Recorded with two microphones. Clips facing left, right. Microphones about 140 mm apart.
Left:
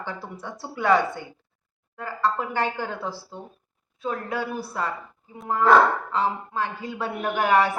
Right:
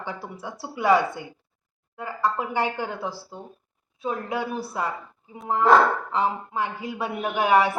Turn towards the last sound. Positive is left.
turn(degrees=-10)  # may be behind; listen again after turning